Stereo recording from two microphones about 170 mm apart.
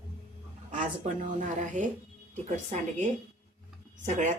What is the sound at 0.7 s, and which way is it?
Speech, 45° right (ahead or behind).